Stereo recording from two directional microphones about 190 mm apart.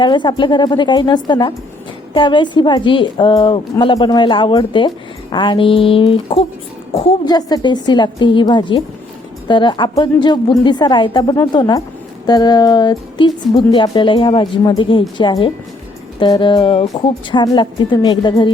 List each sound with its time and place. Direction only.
0.0 s a woman's voice: 25° left (ahead or behind)